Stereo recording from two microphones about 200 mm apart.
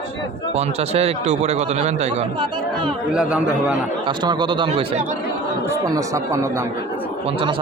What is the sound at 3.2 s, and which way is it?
Speech, 5° right (ahead or behind).